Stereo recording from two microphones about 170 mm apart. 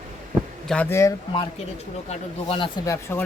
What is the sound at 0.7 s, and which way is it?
Speech, 10° left (ahead or behind).